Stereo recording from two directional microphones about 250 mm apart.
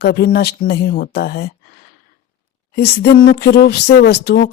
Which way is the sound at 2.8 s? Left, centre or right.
Left.